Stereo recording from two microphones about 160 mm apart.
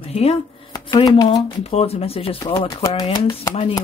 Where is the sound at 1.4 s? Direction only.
40° left (ahead or behind).